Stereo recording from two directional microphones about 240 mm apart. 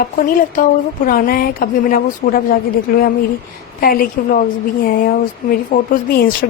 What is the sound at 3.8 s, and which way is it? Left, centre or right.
Speech, left.